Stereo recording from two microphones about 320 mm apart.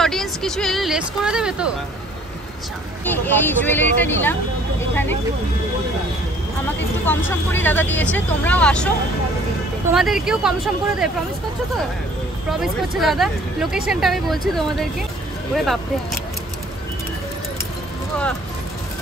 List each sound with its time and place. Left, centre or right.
0.0 s speech: centre
3.1 s speech: centre
7.1 s speech: centre
9.9 s speech: centre
12.4 s speech: centre